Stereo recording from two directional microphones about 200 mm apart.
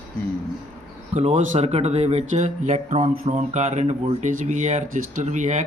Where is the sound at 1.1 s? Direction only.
30° right (ahead or behind).